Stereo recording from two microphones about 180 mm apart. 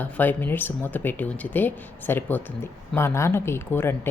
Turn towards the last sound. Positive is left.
turn(degrees=10)  # may be behind; listen again after turning